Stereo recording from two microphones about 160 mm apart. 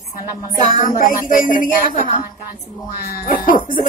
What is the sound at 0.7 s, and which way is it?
Speech, 60° left (ahead or behind).